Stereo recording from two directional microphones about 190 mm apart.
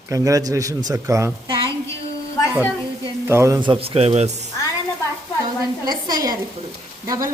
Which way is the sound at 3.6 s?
25° right (ahead or behind).